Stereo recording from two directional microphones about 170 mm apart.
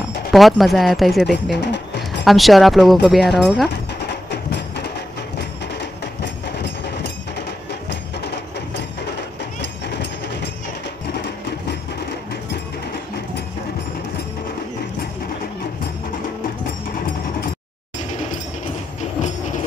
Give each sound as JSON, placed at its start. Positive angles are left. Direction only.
{"t": 0.3, "sound": "speech", "side_deg": 0}
{"t": 1.6, "sound": "music", "side_deg": 90}
{"t": 2.2, "sound": "speech", "side_deg": 0}
{"t": 7.9, "sound": "music", "side_deg": 85}